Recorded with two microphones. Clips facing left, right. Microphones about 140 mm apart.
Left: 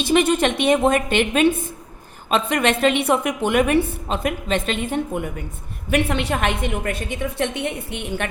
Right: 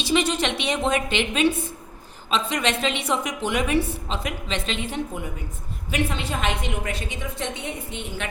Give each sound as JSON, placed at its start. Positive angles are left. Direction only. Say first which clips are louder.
{"t": 0.0, "sound": "a woman's voice", "louder": "left 5 dB", "side_deg": 55}